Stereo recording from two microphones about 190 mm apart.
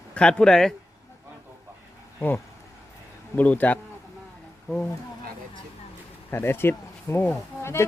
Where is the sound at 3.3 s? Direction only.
10° left (ahead or behind).